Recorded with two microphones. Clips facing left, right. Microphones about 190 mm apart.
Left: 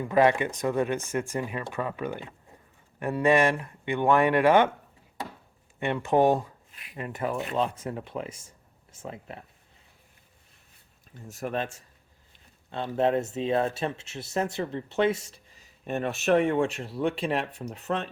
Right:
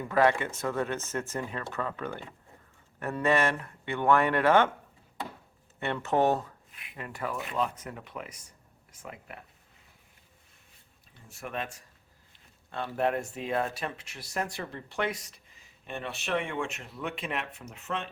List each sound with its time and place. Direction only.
0.0 s speech: 20° left (ahead or behind)
5.8 s speech: 15° left (ahead or behind)
11.1 s speech: 40° left (ahead or behind)
12.7 s speech: 20° left (ahead or behind); by 18.1 s 35° left (ahead or behind)